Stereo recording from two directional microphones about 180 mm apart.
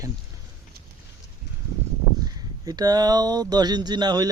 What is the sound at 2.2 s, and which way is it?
Speech, 20° right (ahead or behind).